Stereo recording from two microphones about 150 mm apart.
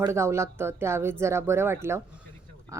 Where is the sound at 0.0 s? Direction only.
20° right (ahead or behind).